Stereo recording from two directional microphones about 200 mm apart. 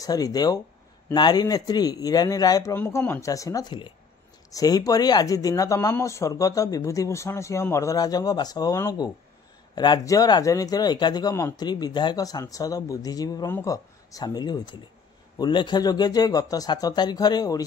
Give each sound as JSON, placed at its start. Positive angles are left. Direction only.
{"t": 0.0, "sound": "speech", "side_deg": 20}